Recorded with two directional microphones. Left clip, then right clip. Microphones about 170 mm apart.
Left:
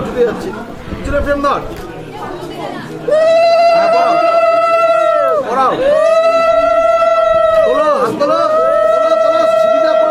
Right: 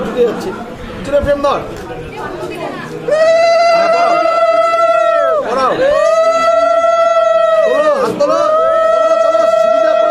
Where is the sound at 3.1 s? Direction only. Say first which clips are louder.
Even; 15° left (ahead or behind).